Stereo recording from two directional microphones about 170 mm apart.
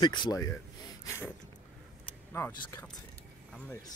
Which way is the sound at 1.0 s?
15° left (ahead or behind).